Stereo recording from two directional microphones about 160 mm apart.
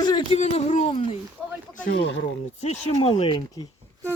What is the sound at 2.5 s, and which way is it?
Speech, 45° left (ahead or behind).